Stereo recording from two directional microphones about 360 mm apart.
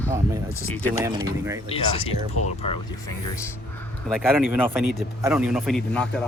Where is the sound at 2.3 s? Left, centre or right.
Left.